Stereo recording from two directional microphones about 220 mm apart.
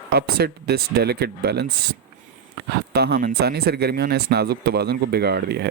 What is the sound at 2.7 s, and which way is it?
Speech, 45° right (ahead or behind).